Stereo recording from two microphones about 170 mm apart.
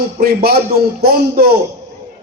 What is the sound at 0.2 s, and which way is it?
A man's voice, 65° right (ahead or behind).